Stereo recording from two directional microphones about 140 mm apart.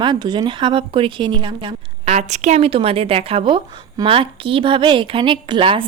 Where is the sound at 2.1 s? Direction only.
55° right (ahead or behind); by 5.8 s 40° right (ahead or behind).